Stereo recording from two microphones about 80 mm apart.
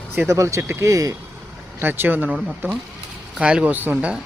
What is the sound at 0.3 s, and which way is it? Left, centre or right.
Speech, right.